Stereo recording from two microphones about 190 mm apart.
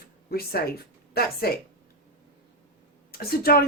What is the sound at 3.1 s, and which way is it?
Speech, 55° left (ahead or behind).